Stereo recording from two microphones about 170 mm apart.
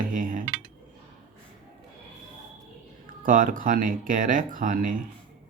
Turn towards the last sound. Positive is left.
turn(degrees=-50)  # may be behind; listen again after turning